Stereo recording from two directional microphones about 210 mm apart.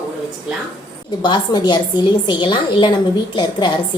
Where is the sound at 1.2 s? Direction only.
20° left (ahead or behind).